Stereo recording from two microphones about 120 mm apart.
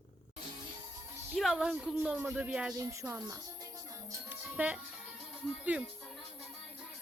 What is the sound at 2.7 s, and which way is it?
Speech, 25° right (ahead or behind).